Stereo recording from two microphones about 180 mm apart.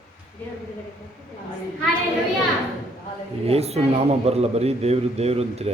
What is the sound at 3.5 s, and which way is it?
A man's voice, 35° right (ahead or behind).